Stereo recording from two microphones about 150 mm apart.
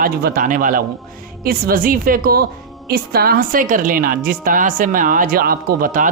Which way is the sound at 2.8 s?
90° right.